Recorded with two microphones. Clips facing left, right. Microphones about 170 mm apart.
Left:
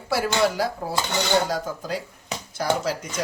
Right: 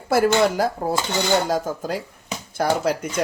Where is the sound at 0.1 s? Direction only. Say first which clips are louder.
Right 5 dB; 50° right (ahead or behind).